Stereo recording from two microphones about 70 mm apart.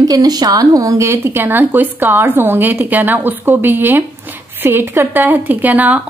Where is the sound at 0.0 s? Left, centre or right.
Right.